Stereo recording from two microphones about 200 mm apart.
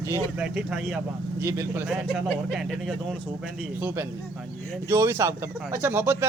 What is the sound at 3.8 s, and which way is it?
Speech, 10° right (ahead or behind).